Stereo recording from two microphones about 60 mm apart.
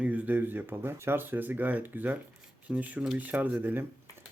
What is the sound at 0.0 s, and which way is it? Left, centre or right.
Speech, right.